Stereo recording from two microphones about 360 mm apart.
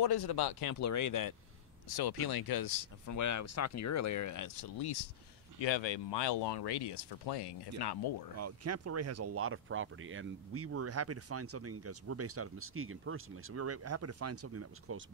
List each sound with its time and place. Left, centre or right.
0.0 s speech: left
0.7 s speech: left
1.9 s speech: left
6.3 s speech: left
8.4 s speech: right